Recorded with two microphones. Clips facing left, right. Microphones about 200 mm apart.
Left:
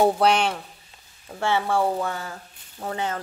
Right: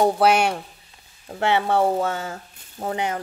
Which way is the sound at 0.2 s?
10° right (ahead or behind).